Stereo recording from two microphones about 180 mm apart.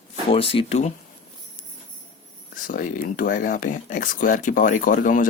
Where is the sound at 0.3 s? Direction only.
30° left (ahead or behind).